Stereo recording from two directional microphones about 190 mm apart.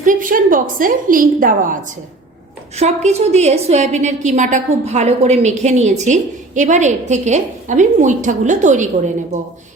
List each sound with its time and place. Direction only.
0.0 s a woman's voice: 45° right (ahead or behind)